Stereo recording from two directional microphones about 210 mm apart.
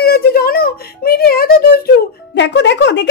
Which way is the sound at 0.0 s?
50° left (ahead or behind).